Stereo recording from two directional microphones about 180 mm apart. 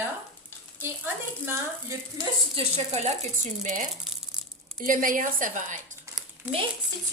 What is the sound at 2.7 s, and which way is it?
A woman's voice, 40° right (ahead or behind).